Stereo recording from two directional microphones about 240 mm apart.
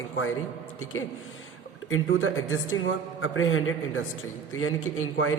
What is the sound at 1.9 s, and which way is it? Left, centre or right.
A man's voice, left.